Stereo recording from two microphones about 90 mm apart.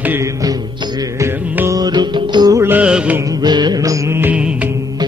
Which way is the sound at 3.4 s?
50° right (ahead or behind).